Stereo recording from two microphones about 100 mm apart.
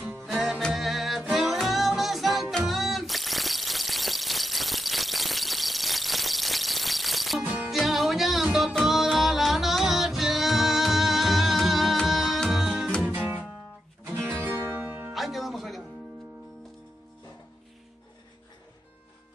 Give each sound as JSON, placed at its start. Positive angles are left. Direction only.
{"t": 0.0, "sound": "music", "side_deg": -5}
{"t": 13.0, "sound": "music", "side_deg": -15}
{"t": 15.1, "sound": "music", "side_deg": 0}